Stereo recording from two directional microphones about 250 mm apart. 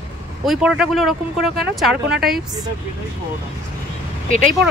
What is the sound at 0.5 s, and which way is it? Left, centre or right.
Speech, centre.